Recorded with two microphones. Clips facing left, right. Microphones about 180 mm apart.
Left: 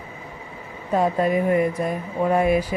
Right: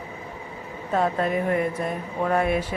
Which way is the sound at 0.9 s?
10° left (ahead or behind).